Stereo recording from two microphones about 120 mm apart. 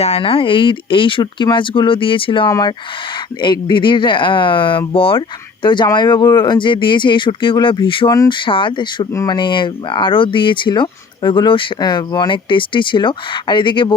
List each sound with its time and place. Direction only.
0.0 s speech: 55° left (ahead or behind)
2.5 s speech: 30° left (ahead or behind)